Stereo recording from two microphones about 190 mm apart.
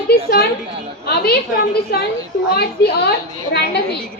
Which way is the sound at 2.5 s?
55° left (ahead or behind).